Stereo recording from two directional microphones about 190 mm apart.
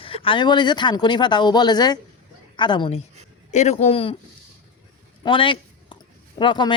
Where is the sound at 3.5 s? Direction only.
35° left (ahead or behind).